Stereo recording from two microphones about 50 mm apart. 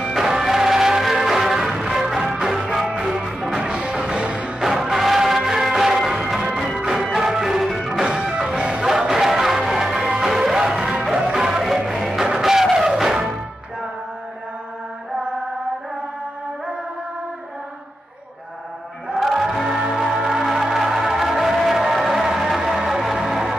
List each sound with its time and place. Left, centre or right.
0.0 s music: centre
4.6 s music: centre
19.1 s music: centre